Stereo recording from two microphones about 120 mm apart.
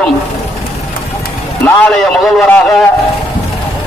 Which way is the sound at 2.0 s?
Centre (ahead or behind).